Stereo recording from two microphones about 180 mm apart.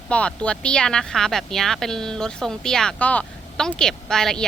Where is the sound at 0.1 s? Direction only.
5° left (ahead or behind).